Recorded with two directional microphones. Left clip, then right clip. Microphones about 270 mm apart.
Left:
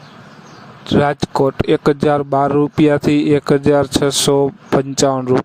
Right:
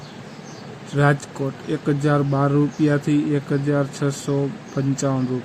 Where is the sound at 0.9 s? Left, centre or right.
Left.